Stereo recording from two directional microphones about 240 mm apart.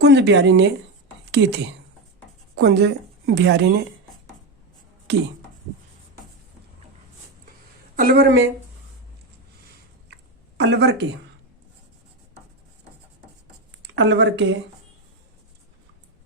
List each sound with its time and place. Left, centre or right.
0.0 s a woman's voice: right
7.9 s speech: right
10.6 s a woman's voice: right
13.8 s speech: right